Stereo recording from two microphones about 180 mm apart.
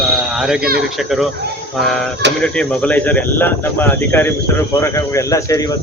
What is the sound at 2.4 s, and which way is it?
Speech, 5° left (ahead or behind).